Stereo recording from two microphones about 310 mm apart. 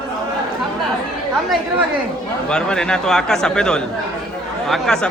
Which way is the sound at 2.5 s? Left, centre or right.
Centre.